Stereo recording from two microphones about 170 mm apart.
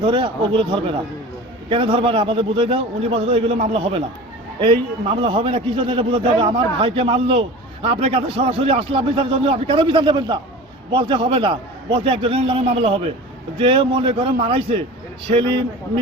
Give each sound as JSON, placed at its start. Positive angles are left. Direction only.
{"t": 0.0, "sound": "a man's voice", "side_deg": -30}